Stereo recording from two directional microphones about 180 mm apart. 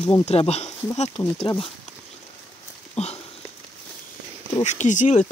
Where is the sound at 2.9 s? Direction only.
35° left (ahead or behind).